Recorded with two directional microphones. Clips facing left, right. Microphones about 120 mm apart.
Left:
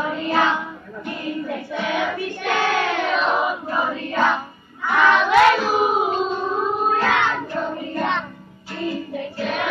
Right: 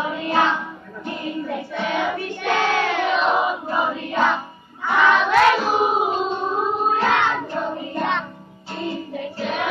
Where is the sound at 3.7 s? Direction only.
20° right (ahead or behind).